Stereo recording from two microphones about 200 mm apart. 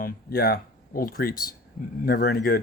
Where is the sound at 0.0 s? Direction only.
50° left (ahead or behind).